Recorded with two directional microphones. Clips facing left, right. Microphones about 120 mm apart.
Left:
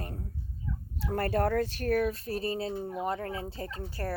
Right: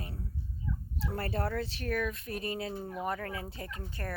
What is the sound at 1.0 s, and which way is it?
Speech, 50° left (ahead or behind).